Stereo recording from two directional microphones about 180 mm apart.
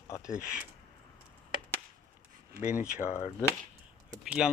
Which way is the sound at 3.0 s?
15° left (ahead or behind).